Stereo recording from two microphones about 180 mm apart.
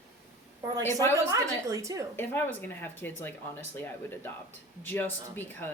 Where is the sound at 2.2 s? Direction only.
10° left (ahead or behind).